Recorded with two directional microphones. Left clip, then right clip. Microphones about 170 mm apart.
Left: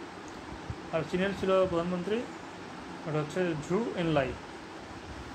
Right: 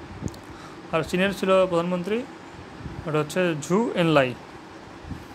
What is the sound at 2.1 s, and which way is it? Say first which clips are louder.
Speech: right 4 dB; 35° right (ahead or behind).